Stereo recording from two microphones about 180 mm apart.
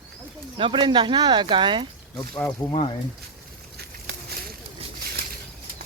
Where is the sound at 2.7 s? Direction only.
30° left (ahead or behind).